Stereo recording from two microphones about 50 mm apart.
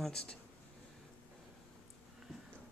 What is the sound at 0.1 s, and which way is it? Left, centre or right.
Speech, centre.